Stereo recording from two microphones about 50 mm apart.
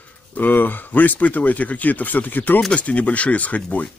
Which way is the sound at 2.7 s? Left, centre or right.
Left.